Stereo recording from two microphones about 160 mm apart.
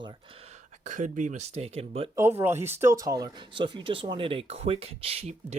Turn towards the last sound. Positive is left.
turn(degrees=-40)  # may be behind; listen again after turning